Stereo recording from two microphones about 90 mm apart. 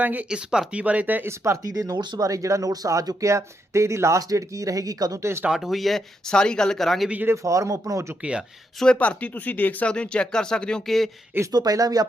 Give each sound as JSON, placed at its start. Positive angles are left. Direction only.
{"t": 0.0, "sound": "speech", "side_deg": -20}
{"t": 1.6, "sound": "speech", "side_deg": -40}
{"t": 2.0, "sound": "speech", "side_deg": -55}
{"t": 2.2, "sound": "speech", "side_deg": -40}
{"t": 5.2, "sound": "speech", "side_deg": -30}
{"t": 5.5, "sound": "speech", "side_deg": 0}
{"t": 7.1, "sound": "speech", "side_deg": -20}
{"t": 7.4, "sound": "speech", "side_deg": -35}
{"t": 8.2, "sound": "speech", "side_deg": -10}
{"t": 8.8, "sound": "speech", "side_deg": 10}
{"t": 11.5, "sound": "speech", "side_deg": -45}